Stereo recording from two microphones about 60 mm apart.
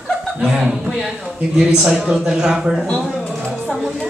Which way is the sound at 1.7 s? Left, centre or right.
Centre.